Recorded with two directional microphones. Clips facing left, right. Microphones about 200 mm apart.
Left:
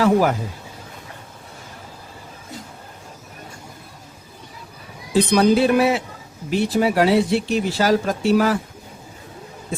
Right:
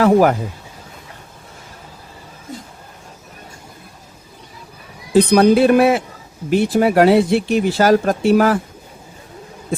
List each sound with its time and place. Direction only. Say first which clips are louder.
0.0 s speech: right 4 dB; 55° right (ahead or behind)
5.1 s speech: right 4 dB; 55° right (ahead or behind)